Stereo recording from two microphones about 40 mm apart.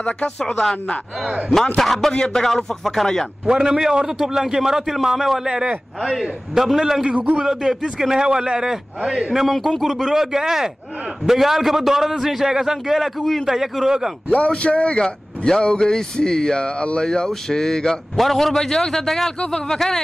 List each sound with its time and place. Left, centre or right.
1.8 s speech: centre
3.4 s a man's voice: centre
6.5 s a man's voice: centre
9.8 s a man's voice: centre
10.1 s a man's voice: centre
14.3 s a man's voice: left
15.0 s speech: centre